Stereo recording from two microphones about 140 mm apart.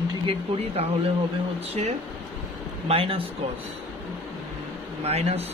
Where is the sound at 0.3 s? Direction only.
45° right (ahead or behind).